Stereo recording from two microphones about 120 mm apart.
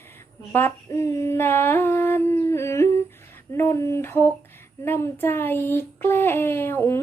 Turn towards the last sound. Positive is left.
turn(degrees=20)  # may be behind; listen again after turning